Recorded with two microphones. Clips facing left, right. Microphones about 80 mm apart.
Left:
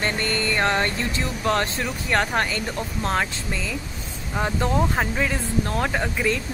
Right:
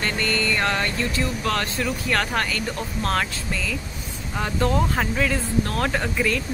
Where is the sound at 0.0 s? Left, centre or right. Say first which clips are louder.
Even; left.